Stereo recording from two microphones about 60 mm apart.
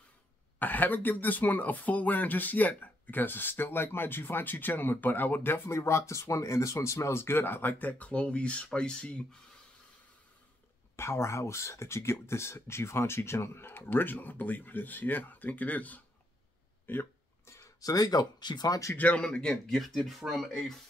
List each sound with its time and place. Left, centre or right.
0.6 s speech: left
5.7 s speech: left; by 9.4 s centre
11.0 s speech: left
17.6 s a sound: left
18.7 s speech: left
18.9 s speech: left
20.1 s speech: centre